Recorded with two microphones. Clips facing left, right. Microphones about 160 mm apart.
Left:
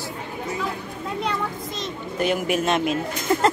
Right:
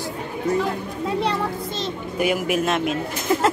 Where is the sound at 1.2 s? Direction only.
30° right (ahead or behind).